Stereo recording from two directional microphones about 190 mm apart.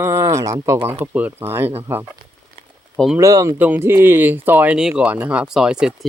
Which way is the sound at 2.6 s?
30° right (ahead or behind).